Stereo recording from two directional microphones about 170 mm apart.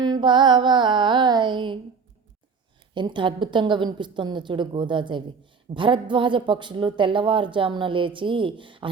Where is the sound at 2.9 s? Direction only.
25° right (ahead or behind).